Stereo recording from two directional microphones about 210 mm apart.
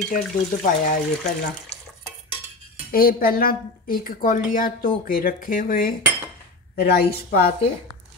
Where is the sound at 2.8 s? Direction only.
45° left (ahead or behind).